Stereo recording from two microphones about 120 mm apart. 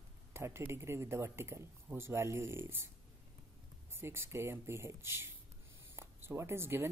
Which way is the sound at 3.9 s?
20° right (ahead or behind).